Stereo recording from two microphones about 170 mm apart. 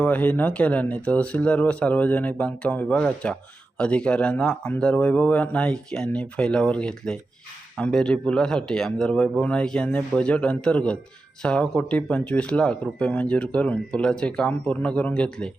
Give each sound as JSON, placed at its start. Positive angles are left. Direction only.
{"t": 0.0, "sound": "speech", "side_deg": 10}